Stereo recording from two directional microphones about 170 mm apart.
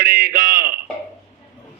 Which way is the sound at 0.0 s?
55° right (ahead or behind).